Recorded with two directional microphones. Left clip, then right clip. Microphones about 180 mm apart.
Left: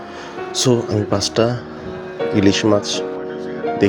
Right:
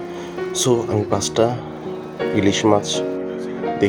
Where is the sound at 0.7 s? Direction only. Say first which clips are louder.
Left 1 dB; 20° left (ahead or behind).